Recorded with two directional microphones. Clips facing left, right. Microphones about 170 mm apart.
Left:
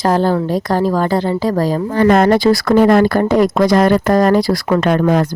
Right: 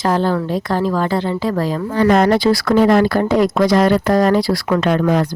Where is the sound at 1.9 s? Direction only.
50° left (ahead or behind).